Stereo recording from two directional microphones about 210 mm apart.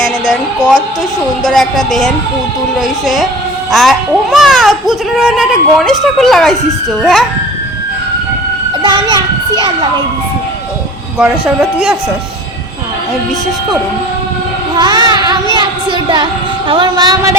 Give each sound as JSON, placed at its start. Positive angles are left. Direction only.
{"t": 1.5, "sound": "a child's voice", "side_deg": 0}
{"t": 8.8, "sound": "a child's voice", "side_deg": -20}
{"t": 11.2, "sound": "a child's voice", "side_deg": -5}
{"t": 14.8, "sound": "a woman's voice", "side_deg": -20}